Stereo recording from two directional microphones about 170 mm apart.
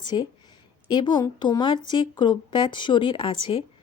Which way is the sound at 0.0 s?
25° left (ahead or behind).